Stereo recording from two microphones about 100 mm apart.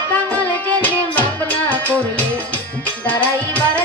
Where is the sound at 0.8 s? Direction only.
15° left (ahead or behind).